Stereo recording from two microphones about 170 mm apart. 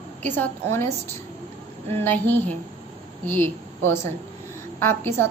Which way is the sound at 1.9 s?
10° left (ahead or behind).